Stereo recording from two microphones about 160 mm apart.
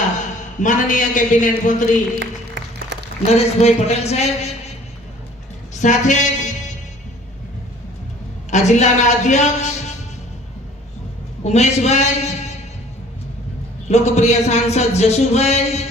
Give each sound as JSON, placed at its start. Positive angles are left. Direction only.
{"t": 0.6, "sound": "speech", "side_deg": 55}
{"t": 2.6, "sound": "applause", "side_deg": -90}
{"t": 2.9, "sound": "a sound", "side_deg": -90}
{"t": 3.2, "sound": "a man's voice", "side_deg": 40}
{"t": 5.7, "sound": "speech", "side_deg": 50}
{"t": 8.4, "sound": "a man's voice", "side_deg": 45}
{"t": 11.4, "sound": "speech", "side_deg": 45}
{"t": 13.8, "sound": "speech", "side_deg": 45}